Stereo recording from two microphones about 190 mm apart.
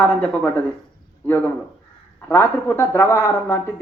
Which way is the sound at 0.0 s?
10° left (ahead or behind).